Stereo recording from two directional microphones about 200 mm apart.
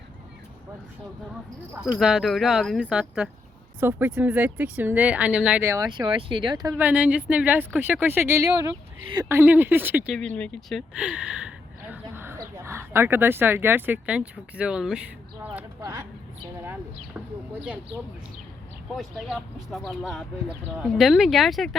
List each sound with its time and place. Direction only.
1.7 s speech: 5° right (ahead or behind)
15.8 s speech: 15° right (ahead or behind)
18.9 s speech: centre (ahead or behind)